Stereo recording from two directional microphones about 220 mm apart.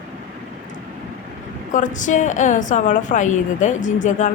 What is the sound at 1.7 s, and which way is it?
A woman's voice, 35° left (ahead or behind).